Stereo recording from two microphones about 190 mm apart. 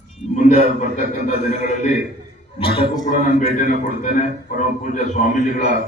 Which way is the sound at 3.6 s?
40° left (ahead or behind).